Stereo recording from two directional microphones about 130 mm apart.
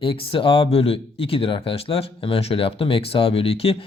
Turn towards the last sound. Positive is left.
turn(degrees=50)  # may be behind; listen again after turning